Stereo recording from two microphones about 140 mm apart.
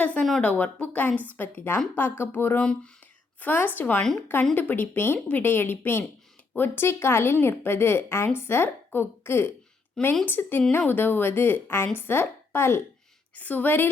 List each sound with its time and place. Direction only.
0.0 s a woman's voice: 5° left (ahead or behind)